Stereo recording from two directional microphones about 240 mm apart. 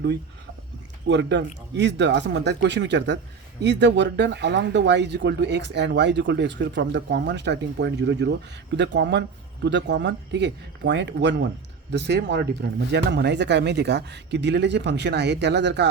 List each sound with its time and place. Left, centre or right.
1.0 s speech: right